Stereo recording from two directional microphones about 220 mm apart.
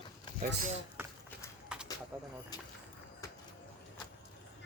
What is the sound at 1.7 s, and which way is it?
Bird, 5° right (ahead or behind).